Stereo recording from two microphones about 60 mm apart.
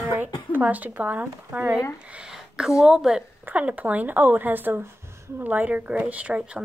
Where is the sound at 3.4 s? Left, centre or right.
Right.